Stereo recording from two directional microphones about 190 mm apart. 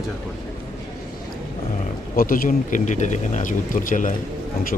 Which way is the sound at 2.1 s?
50° left (ahead or behind).